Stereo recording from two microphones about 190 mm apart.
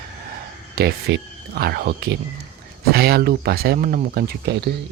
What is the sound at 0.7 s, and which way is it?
Speech, 55° right (ahead or behind).